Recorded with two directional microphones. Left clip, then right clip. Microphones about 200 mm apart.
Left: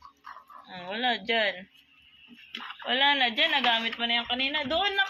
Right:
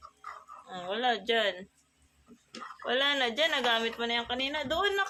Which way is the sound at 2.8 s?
10° right (ahead or behind).